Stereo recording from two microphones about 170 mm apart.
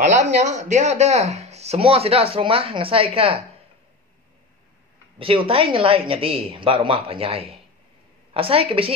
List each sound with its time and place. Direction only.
0.0 s speech: 45° right (ahead or behind)
5.2 s speech: 30° right (ahead or behind)